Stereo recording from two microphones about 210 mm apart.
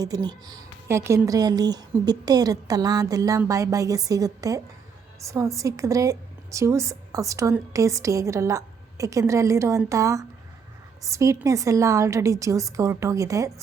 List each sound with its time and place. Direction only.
0.0 s a woman's voice: 20° right (ahead or behind)